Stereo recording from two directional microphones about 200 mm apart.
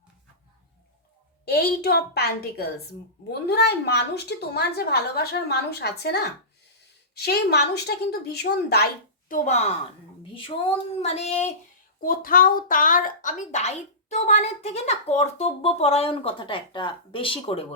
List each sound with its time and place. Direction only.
1.5 s a woman's voice: 50° left (ahead or behind)
9.3 s a woman's voice: 35° left (ahead or behind)
11.9 s a woman's voice: 45° left (ahead or behind); by 17.7 s 30° left (ahead or behind)